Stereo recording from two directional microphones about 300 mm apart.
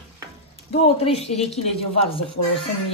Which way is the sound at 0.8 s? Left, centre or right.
Centre.